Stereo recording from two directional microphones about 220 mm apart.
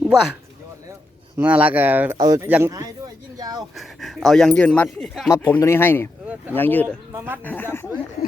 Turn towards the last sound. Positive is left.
turn(degrees=10)  # may be behind; listen again after turning